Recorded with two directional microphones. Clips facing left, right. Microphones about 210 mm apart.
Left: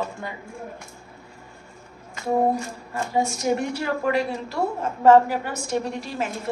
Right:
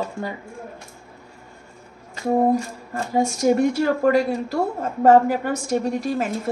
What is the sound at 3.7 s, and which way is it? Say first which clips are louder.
A woman's voice: right 6 dB; 45° right (ahead or behind).